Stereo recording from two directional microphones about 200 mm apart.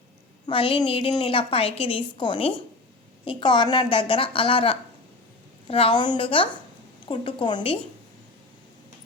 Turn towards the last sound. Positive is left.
turn(degrees=25)  # may be behind; listen again after turning